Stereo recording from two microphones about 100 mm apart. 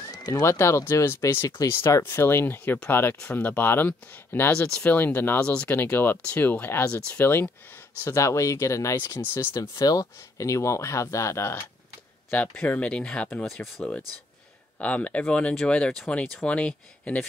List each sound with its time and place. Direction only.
0.1 s speech: 40° left (ahead or behind)
9.5 s speech: 40° left (ahead or behind)
12.3 s speech: 15° left (ahead or behind)